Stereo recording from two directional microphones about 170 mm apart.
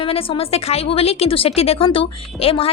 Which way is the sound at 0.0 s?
35° left (ahead or behind).